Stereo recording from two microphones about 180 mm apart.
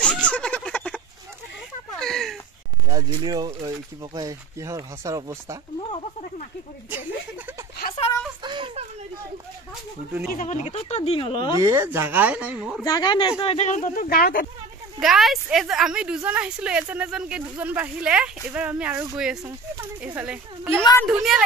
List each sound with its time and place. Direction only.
0.0 s a sound: 5° left (ahead or behind)
2.0 s a sound: centre (ahead or behind)
2.9 s speech: 20° right (ahead or behind)
5.8 s speech: 30° left (ahead or behind)
8.5 s a sound: 25° right (ahead or behind)
10.3 s speech: 45° left (ahead or behind)
11.5 s speech: 15° right (ahead or behind)
12.8 s speech: 25° left (ahead or behind)
13.4 s speech: 35° left (ahead or behind); by 14.4 s 55° left (ahead or behind)
15.0 s a woman's voice: centre (ahead or behind)